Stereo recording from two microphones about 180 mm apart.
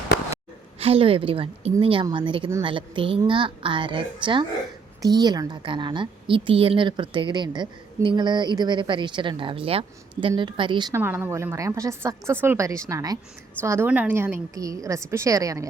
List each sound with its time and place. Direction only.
0.8 s a woman's voice: 30° right (ahead or behind)